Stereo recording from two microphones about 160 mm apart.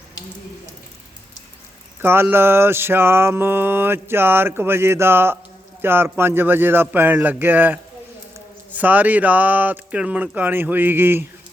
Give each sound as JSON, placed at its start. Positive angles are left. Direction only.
{"t": 2.0, "sound": "mantra", "side_deg": -15}